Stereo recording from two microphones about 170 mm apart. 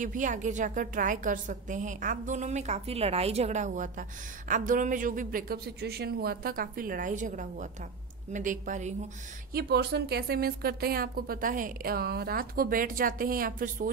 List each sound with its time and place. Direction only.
0.0 s a woman's voice: 50° right (ahead or behind)
9.5 s a woman's voice: 70° right (ahead or behind)